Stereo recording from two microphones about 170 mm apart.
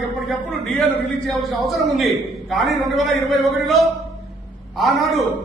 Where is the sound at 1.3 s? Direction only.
Centre (ahead or behind).